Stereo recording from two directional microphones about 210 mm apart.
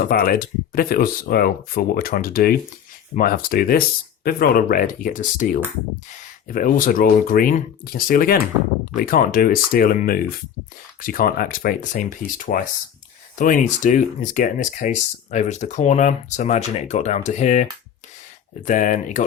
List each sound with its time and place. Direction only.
0.0 s speech: 45° left (ahead or behind)